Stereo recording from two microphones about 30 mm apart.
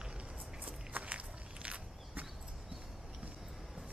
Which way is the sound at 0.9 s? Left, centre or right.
Right.